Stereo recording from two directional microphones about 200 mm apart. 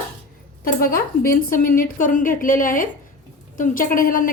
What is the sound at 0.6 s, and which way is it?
A woman's voice, 45° left (ahead or behind).